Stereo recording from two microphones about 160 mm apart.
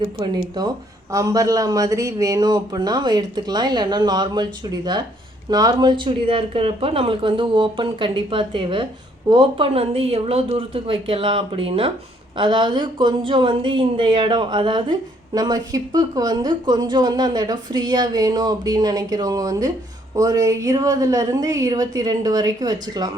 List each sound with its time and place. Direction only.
0.6 s speech: 25° right (ahead or behind)